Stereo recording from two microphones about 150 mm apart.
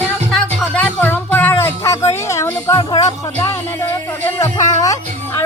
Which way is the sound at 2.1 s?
20° left (ahead or behind).